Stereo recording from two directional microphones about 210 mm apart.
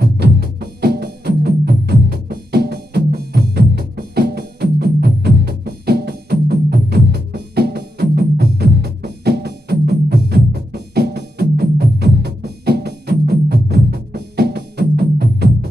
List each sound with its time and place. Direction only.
0.0 s music: 50° right (ahead or behind)